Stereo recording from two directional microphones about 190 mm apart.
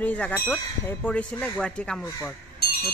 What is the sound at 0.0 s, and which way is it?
Speech, 10° left (ahead or behind).